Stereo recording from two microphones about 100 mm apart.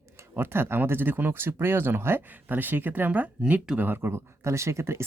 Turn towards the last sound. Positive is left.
turn(degrees=-25)  # may be behind; listen again after turning